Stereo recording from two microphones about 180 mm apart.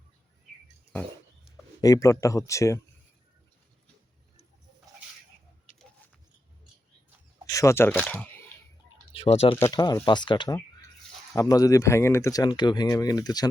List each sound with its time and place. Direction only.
1.8 s speech: 20° left (ahead or behind)
7.4 s speech: 15° left (ahead or behind)
9.1 s speech: 35° left (ahead or behind)
9.6 s speech: 20° left (ahead or behind)